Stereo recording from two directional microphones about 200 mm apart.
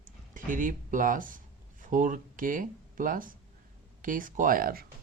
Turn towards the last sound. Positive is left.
turn(degrees=-45)  # may be behind; listen again after turning